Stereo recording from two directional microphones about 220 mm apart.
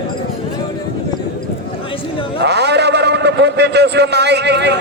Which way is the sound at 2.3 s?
50° right (ahead or behind).